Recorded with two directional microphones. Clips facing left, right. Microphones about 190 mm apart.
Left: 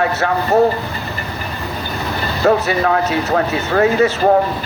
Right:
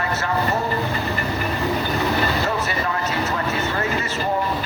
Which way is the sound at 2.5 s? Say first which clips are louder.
Left 9 dB; 65° left (ahead or behind).